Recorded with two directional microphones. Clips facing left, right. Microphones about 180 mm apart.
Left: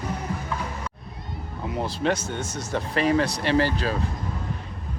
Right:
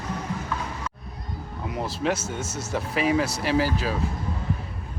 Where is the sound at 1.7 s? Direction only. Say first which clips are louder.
Left 1 dB; 5° right (ahead or behind).